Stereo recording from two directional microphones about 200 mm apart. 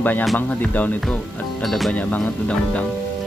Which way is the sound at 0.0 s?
5° left (ahead or behind).